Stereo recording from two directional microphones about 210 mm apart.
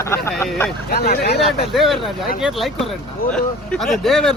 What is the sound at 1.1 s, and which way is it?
Speech, 45° left (ahead or behind).